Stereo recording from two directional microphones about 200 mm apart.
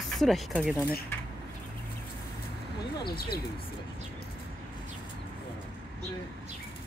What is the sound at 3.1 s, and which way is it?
Speech, 50° left (ahead or behind).